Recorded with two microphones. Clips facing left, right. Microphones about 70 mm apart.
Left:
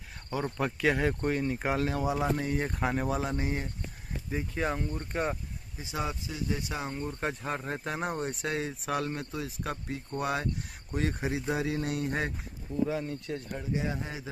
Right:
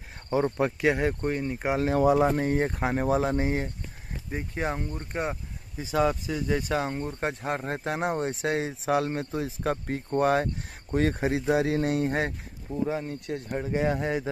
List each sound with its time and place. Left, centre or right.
0.3 s speech: right
0.7 s speech: centre
2.1 s speech: right
4.8 s speech: centre
5.9 s speech: right
6.8 s speech: right
7.9 s speech: right
9.7 s speech: right
10.0 s speech: right
11.2 s speech: right
13.1 s speech: right